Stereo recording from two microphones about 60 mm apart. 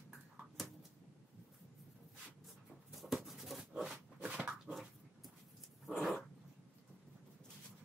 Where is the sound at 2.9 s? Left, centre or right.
Centre.